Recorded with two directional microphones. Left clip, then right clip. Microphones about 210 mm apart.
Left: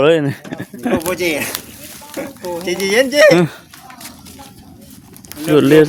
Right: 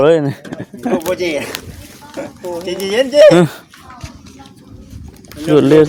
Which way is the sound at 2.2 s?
40° left (ahead or behind).